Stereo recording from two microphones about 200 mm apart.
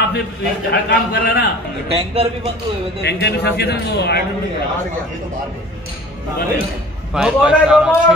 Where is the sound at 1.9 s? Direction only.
30° right (ahead or behind).